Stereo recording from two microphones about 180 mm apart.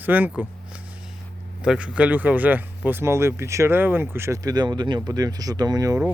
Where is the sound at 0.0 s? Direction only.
10° right (ahead or behind).